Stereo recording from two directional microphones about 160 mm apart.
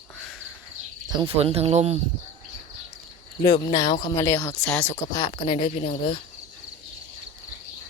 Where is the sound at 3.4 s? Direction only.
25° left (ahead or behind).